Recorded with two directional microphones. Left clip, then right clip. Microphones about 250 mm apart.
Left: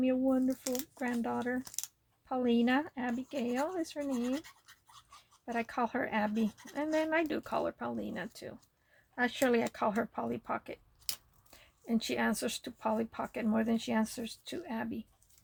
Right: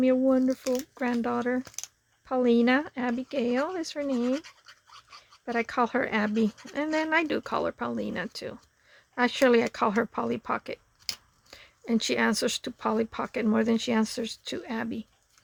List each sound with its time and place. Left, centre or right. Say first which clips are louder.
0.0 s speech: right 8 dB; right
0.5 s speech: right 8 dB; centre
0.9 s speech: right 7 dB; right
1.6 s speech: right 3 dB; centre
2.2 s speech: right 8 dB; right
5.5 s speech: right 7 dB; right